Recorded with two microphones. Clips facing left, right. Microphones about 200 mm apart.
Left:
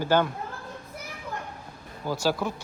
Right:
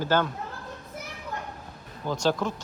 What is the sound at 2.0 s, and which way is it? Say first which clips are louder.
Speech: right 1 dB; 5° left (ahead or behind).